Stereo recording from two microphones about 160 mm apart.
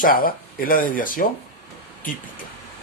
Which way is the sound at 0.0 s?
65° left (ahead or behind).